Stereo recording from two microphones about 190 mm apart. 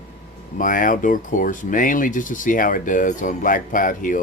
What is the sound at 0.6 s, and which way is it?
Speech, 45° left (ahead or behind).